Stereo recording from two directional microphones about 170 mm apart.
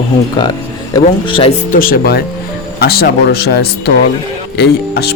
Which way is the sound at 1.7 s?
60° left (ahead or behind).